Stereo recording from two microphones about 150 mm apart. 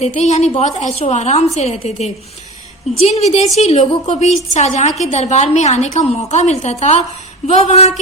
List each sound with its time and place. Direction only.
0.0 s a woman's voice: 45° left (ahead or behind)